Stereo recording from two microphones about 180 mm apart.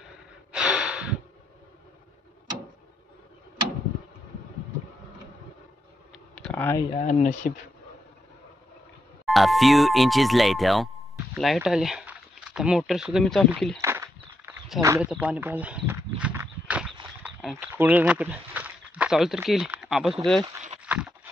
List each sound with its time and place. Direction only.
0.5 s breathing: 5° right (ahead or behind)
6.3 s clicking: 10° left (ahead or behind)
7.0 s speech: 40° left (ahead or behind)
9.2 s speech: centre (ahead or behind)
13.7 s walk: 15° right (ahead or behind)
15.0 s a sound: 5° right (ahead or behind)
17.2 s speech: 5° right (ahead or behind)
20.8 s a sound: 5° right (ahead or behind)